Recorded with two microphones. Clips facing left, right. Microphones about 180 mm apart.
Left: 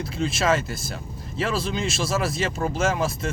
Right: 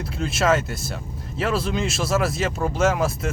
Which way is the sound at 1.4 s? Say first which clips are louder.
Right 2 dB; 5° right (ahead or behind).